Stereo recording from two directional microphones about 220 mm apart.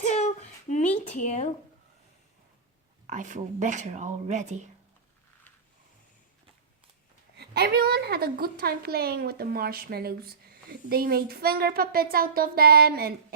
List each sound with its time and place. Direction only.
0.0 s a sound: 30° left (ahead or behind)
1.0 s speech: 30° left (ahead or behind)
3.1 s speech: 35° right (ahead or behind)
7.3 s a woman's voice: 45° right (ahead or behind)